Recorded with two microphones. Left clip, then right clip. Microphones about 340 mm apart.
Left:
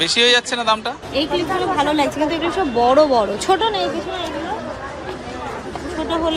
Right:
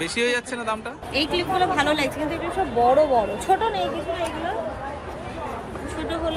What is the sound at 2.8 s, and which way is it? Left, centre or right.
Speech, left.